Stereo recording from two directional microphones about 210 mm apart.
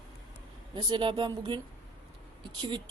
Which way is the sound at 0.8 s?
20° right (ahead or behind).